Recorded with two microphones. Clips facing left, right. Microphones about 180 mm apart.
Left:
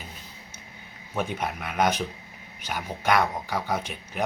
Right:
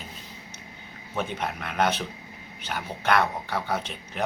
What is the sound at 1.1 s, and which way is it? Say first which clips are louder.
Speech: left 1 dB; 10° left (ahead or behind).